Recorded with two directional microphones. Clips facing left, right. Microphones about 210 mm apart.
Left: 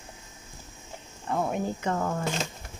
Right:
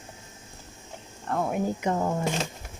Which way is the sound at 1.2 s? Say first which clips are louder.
Even; centre (ahead or behind).